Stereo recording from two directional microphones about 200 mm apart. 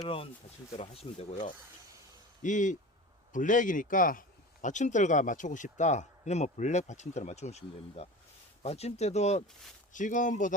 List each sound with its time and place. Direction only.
0.0 s speech: 30° left (ahead or behind)